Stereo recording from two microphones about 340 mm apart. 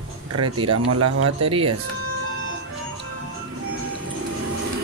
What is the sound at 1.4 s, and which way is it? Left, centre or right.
Speech, centre.